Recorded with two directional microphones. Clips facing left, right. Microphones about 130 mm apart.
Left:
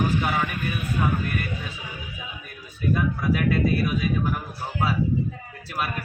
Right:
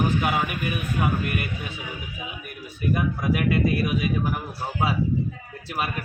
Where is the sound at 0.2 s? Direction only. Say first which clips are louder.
Right 1 dB; 15° right (ahead or behind).